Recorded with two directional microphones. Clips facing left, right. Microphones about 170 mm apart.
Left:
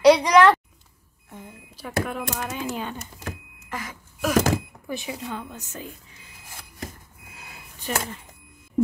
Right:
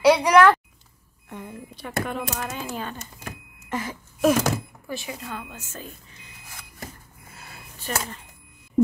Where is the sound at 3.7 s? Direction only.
25° right (ahead or behind).